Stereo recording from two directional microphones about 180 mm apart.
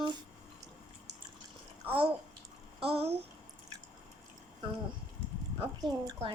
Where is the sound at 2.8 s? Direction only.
35° right (ahead or behind).